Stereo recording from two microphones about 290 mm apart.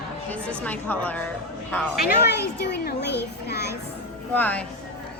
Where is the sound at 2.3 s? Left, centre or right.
Left.